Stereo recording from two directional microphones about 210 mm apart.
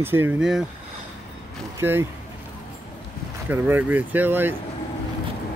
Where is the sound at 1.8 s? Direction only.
10° right (ahead or behind).